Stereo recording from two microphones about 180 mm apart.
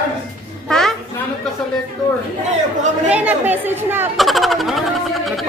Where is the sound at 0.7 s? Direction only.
5° left (ahead or behind).